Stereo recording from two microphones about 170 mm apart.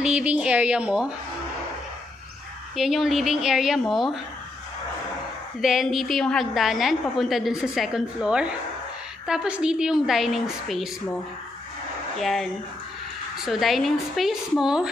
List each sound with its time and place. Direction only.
0.0 s a woman's voice: 5° right (ahead or behind)
2.7 s a woman's voice: centre (ahead or behind)
5.6 s a woman's voice: centre (ahead or behind)
12.2 s a woman's voice: centre (ahead or behind)
13.5 s a woman's voice: centre (ahead or behind)